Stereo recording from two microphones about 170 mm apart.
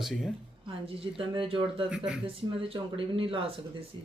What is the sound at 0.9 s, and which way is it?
Speech, 30° right (ahead or behind).